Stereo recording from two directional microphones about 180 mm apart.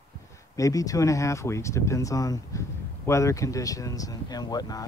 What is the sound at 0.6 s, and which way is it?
Speech, 20° left (ahead or behind).